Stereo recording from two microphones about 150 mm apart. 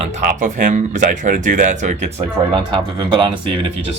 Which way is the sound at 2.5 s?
35° right (ahead or behind).